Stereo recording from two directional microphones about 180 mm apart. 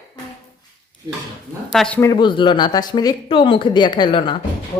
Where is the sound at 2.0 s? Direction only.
25° left (ahead or behind).